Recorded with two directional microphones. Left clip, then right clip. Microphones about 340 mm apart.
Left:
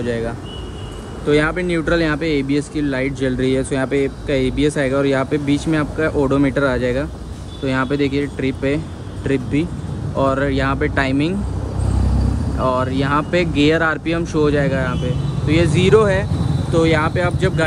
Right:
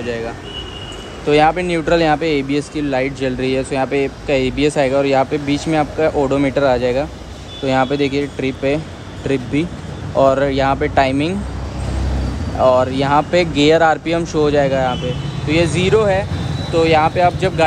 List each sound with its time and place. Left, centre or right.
0.0 s speech: centre
12.6 s speech: centre